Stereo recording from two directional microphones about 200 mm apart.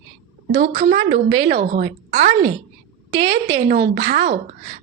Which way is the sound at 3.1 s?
20° right (ahead or behind).